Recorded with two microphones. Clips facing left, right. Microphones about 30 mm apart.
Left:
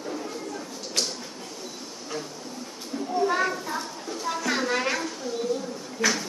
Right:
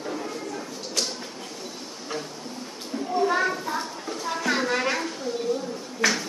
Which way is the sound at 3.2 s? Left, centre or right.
Centre.